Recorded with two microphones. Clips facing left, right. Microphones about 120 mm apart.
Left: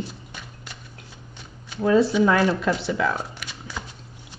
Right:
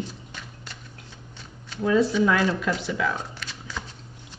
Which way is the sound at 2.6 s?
35° left (ahead or behind).